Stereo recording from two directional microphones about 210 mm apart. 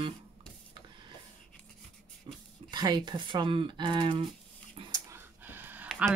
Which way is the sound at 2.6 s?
20° right (ahead or behind).